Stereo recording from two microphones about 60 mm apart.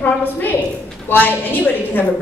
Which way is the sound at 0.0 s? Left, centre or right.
Left.